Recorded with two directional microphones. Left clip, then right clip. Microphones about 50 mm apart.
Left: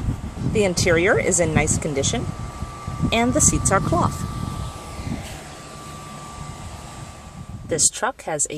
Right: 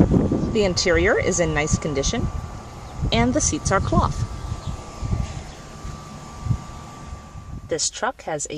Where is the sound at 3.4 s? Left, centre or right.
Left.